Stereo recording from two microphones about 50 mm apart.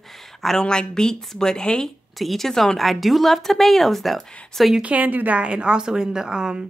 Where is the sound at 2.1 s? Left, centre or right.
Centre.